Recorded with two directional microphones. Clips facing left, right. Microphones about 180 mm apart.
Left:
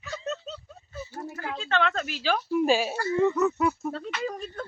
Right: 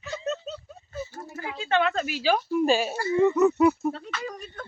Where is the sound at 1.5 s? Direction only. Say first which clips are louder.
Right 3 dB; 10° right (ahead or behind).